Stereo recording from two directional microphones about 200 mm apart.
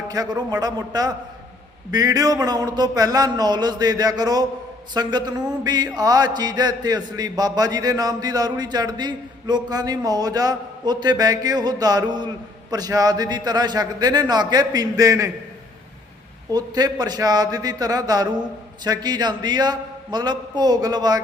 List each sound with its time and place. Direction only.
0.1 s mantra: 20° right (ahead or behind)
16.5 s mantra: 20° right (ahead or behind)